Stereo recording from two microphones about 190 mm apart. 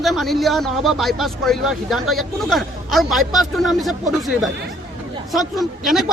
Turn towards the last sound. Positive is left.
turn(degrees=0)  # may be behind; listen again after turning